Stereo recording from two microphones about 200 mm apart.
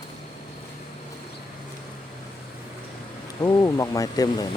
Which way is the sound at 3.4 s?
20° left (ahead or behind).